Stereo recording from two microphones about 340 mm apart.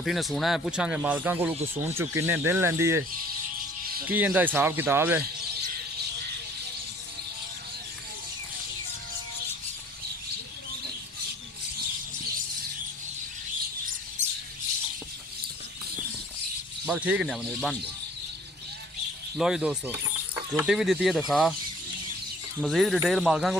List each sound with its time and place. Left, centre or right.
0.0 s speech: centre
4.0 s speech: centre
14.2 s squawk: right
16.8 s speech: centre
19.4 s speech: centre
22.6 s speech: centre